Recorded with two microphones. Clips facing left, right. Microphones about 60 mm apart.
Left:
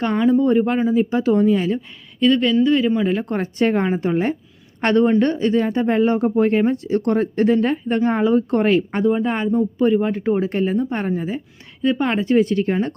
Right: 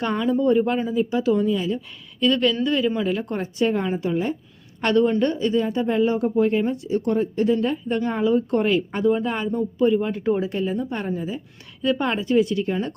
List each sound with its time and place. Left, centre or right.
0.1 s speech: left
2.2 s speech: left
3.1 s speech: left
4.8 s speech: left